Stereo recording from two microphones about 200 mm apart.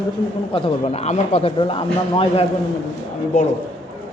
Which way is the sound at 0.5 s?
30° left (ahead or behind).